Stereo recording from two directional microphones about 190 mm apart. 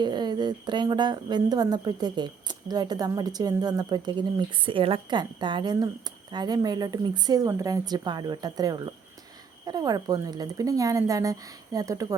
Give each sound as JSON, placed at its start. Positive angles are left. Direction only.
{"t": 0.0, "sound": "a woman's voice", "side_deg": -20}